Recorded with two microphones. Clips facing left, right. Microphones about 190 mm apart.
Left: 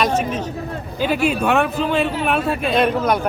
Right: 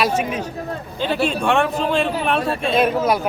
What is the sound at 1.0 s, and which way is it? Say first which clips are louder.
A man's voice: left 1 dB; 10° left (ahead or behind).